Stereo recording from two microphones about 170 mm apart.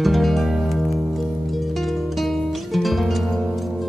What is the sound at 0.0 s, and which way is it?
Music, centre (ahead or behind).